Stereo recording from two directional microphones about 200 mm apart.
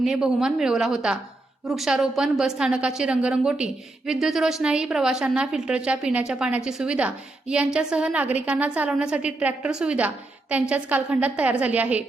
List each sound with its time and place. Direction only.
0.0 s a woman's voice: centre (ahead or behind)